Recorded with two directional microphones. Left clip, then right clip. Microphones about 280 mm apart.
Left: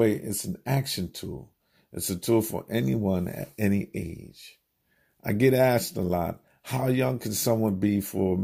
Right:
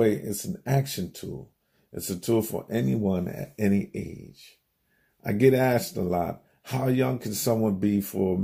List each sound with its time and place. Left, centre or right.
0.0 s speech: left